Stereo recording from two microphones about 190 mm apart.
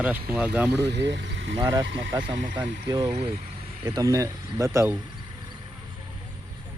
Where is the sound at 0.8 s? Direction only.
65° right (ahead or behind).